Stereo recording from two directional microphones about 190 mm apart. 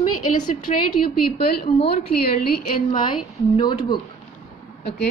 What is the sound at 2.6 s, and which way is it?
A woman's voice, 25° left (ahead or behind).